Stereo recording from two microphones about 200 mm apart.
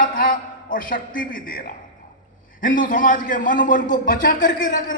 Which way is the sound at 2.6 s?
45° left (ahead or behind).